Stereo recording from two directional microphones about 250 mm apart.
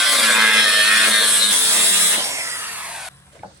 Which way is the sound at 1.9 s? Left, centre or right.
Centre.